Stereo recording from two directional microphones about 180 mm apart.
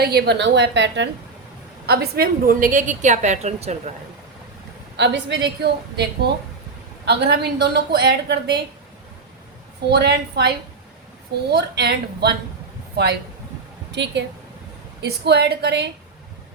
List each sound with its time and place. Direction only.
0.0 s a woman's voice: 65° right (ahead or behind)
1.9 s a woman's voice: 60° right (ahead or behind); by 3.9 s 40° right (ahead or behind)
4.9 s a woman's voice: 75° right (ahead or behind)
9.9 s a woman's voice: 65° right (ahead or behind)
13.9 s a woman's voice: 75° right (ahead or behind)